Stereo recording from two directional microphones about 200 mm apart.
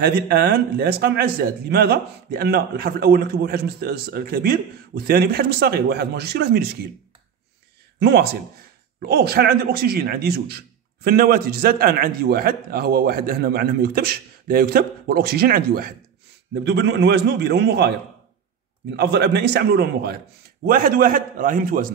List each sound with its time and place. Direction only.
0.0 s a man's voice: 50° right (ahead or behind)
8.0 s a man's voice: 55° right (ahead or behind)